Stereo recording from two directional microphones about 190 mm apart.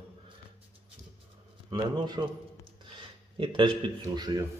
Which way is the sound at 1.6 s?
20° right (ahead or behind).